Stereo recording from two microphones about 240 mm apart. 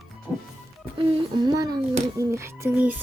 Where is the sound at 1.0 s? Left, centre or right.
Centre.